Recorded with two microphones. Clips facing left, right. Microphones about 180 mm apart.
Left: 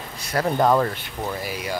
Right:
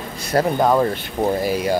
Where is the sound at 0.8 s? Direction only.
40° right (ahead or behind).